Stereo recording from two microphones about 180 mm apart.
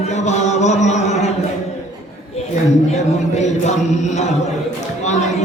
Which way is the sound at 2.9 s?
40° left (ahead or behind).